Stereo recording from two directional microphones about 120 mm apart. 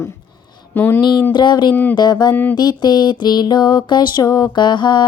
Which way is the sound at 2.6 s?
35° left (ahead or behind).